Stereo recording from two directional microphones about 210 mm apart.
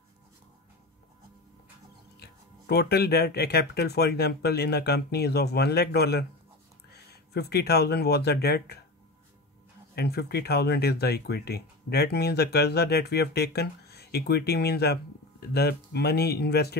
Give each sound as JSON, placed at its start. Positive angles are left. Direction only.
{"t": 2.1, "sound": "speech", "side_deg": 50}
{"t": 9.9, "sound": "speech", "side_deg": 50}